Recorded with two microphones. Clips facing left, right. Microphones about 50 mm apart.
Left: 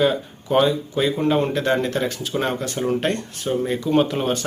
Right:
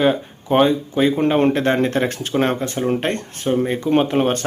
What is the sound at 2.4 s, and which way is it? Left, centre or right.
Speech, right.